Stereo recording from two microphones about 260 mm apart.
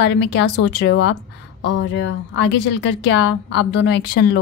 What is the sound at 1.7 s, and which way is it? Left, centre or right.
A woman's voice, left.